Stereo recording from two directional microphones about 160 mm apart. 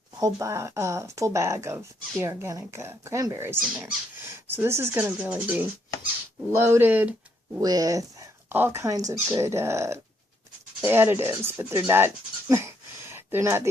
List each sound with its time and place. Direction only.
0.2 s speech: 20° right (ahead or behind)
7.5 s speech: 25° right (ahead or behind)
8.4 s speech: 10° right (ahead or behind)